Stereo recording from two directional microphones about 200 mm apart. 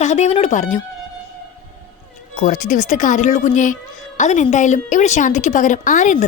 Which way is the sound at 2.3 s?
40° left (ahead or behind).